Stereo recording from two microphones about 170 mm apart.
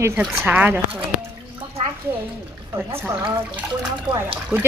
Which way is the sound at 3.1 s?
15° right (ahead or behind).